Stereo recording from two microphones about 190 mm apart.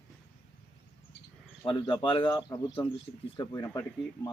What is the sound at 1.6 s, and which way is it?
Speech, 25° left (ahead or behind).